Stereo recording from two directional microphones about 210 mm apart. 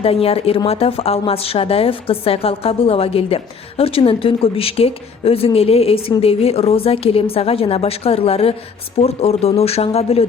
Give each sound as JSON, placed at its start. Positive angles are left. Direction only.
{"t": 0.0, "sound": "speech", "side_deg": 25}